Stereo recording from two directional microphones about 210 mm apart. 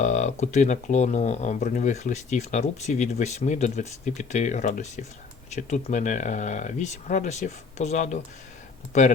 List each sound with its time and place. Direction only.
0.0 s speech: 35° left (ahead or behind)